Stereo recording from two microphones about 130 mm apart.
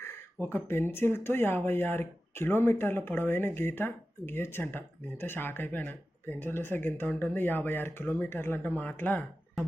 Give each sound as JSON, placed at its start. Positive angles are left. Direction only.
{"t": 0.4, "sound": "speech", "side_deg": 20}